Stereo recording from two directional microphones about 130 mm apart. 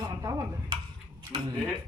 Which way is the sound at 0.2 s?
20° right (ahead or behind).